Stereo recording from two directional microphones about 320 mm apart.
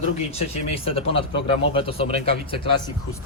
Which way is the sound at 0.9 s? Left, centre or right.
Centre.